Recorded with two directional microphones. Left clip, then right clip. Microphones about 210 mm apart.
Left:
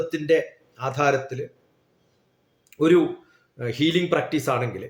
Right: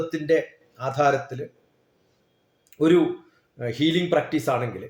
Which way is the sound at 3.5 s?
15° left (ahead or behind).